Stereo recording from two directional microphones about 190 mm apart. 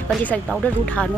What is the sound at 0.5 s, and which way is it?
Speech, 5° left (ahead or behind).